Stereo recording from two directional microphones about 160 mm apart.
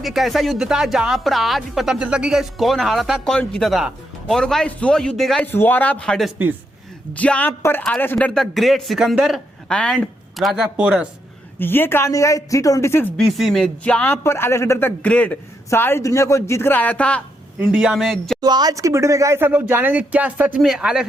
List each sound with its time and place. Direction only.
0.0 s speech: centre (ahead or behind)
5.5 s speech: 15° left (ahead or behind); by 11.1 s 5° right (ahead or behind)
11.6 s speech: 15° left (ahead or behind)
13.1 s speech: centre (ahead or behind)
17.6 s speech: 5° right (ahead or behind)
18.3 s speech: 25° right (ahead or behind); by 21.1 s 5° right (ahead or behind)